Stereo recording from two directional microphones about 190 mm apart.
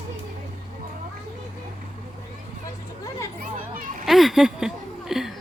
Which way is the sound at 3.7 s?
45° right (ahead or behind).